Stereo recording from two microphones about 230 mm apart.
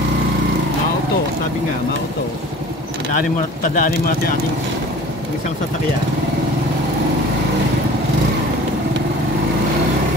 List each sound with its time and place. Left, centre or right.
3.6 s speech: left